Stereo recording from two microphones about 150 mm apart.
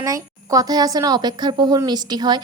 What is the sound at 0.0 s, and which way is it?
A woman's voice, 25° right (ahead or behind).